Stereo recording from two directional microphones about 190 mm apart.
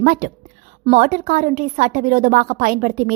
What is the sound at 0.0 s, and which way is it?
A woman's voice, 50° right (ahead or behind).